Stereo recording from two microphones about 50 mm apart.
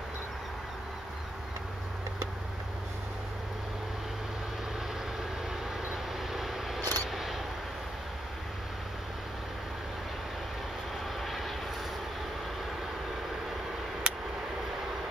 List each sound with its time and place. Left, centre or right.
5.9 s vehicle: centre
11.1 s vehicle: centre
14.0 s a sound: centre